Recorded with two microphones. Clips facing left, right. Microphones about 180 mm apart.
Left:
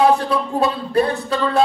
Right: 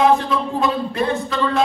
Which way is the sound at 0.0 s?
35° left (ahead or behind).